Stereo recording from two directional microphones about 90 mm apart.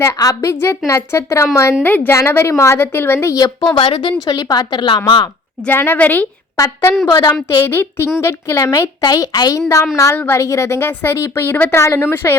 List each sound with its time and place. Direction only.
0.0 s a woman's voice: 35° left (ahead or behind)
3.8 s a woman's voice: 75° left (ahead or behind)
4.3 s a woman's voice: 45° left (ahead or behind)
5.6 s a woman's voice: 25° left (ahead or behind)
7.1 s speech: 40° left (ahead or behind)
7.6 s a woman's voice: 25° left (ahead or behind)
9.0 s speech: 45° left (ahead or behind)
10.2 s a woman's voice: 25° left (ahead or behind)
10.4 s a woman's voice: 35° left (ahead or behind)